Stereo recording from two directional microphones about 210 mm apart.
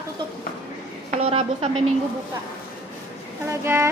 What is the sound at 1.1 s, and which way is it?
Speech, 30° right (ahead or behind).